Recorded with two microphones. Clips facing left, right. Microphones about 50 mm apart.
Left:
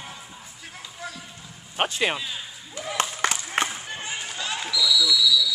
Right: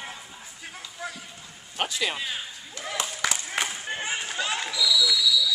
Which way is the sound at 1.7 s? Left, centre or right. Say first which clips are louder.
Left 4 dB; left.